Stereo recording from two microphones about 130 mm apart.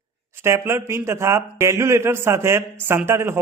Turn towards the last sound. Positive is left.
turn(degrees=-20)  # may be behind; listen again after turning